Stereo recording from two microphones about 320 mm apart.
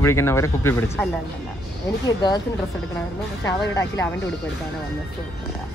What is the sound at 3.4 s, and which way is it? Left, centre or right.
Speech, centre.